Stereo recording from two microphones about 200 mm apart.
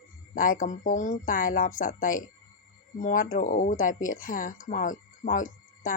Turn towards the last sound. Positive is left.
turn(degrees=40)  # may be behind; listen again after turning